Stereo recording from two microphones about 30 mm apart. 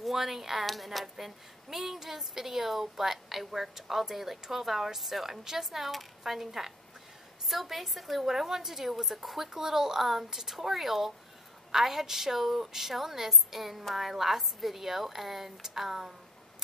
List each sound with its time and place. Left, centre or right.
0.0 s speech: centre
0.7 s a woman's voice: centre
1.0 s a woman's voice: centre
5.9 s a woman's voice: centre
7.4 s a woman's voice: centre